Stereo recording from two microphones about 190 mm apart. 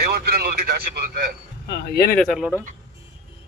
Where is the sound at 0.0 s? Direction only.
55° right (ahead or behind).